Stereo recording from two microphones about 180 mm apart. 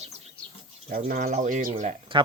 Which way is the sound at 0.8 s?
55° right (ahead or behind).